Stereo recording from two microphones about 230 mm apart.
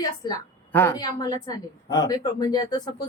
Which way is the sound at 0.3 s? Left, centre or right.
Centre.